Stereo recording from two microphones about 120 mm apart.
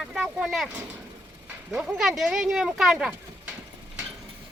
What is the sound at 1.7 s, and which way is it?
Speech, 5° right (ahead or behind).